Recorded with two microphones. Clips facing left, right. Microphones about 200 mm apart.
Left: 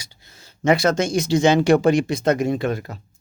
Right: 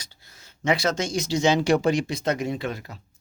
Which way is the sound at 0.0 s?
15° left (ahead or behind).